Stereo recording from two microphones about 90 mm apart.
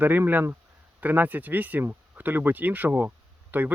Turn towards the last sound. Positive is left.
turn(degrees=-20)  # may be behind; listen again after turning